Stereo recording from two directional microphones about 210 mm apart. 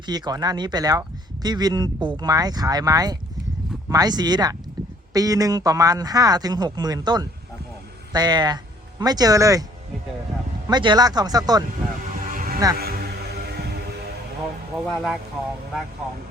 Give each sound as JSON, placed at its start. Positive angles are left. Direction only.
{"t": 0.0, "sound": "speech", "side_deg": -20}
{"t": 10.7, "sound": "speech", "side_deg": -20}
{"t": 12.3, "sound": "music", "side_deg": -40}
{"t": 14.9, "sound": "speech", "side_deg": 0}